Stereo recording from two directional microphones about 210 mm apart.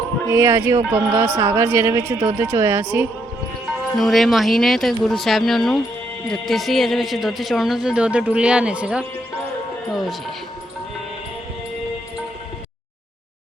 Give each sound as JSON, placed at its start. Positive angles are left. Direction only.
{"t": 0.3, "sound": "speech", "side_deg": -15}
{"t": 3.9, "sound": "a man's voice", "side_deg": 0}